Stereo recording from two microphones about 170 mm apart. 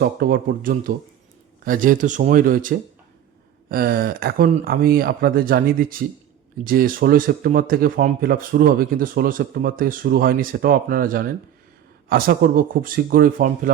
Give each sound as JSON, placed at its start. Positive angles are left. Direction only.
{"t": 0.0, "sound": "speech", "side_deg": -70}